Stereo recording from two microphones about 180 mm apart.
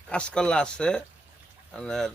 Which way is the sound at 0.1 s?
5° left (ahead or behind).